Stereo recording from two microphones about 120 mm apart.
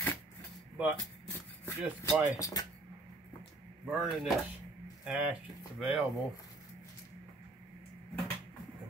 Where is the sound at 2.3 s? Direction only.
30° left (ahead or behind).